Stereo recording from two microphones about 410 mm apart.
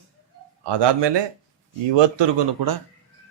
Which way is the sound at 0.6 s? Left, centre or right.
Right.